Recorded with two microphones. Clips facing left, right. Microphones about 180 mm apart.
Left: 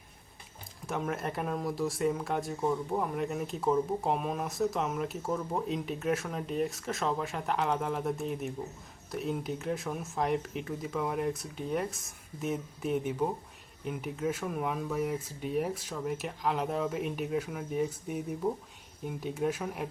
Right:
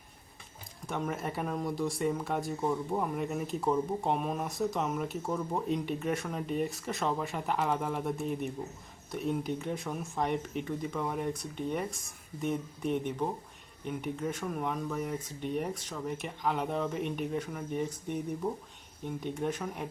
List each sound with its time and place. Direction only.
0.9 s speech: centre (ahead or behind)